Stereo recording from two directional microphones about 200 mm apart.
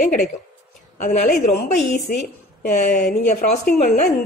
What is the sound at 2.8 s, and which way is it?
A woman's voice, 40° left (ahead or behind).